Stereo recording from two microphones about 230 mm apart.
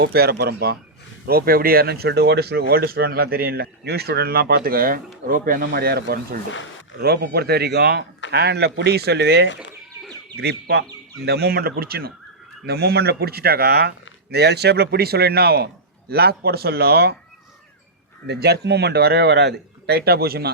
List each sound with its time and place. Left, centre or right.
0.0 s speech: right
18.3 s speech: right